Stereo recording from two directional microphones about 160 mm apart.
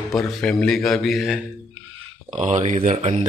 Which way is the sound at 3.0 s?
35° right (ahead or behind).